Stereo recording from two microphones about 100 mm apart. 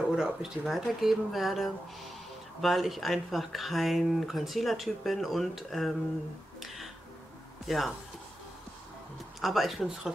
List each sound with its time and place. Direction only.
0.1 s speech: 5° right (ahead or behind)
7.6 s speech: centre (ahead or behind)
9.4 s speech: centre (ahead or behind)